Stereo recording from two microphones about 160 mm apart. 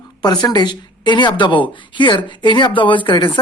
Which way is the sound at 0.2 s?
25° left (ahead or behind).